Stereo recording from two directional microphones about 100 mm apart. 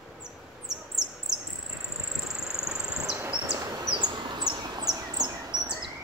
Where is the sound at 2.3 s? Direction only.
5° right (ahead or behind).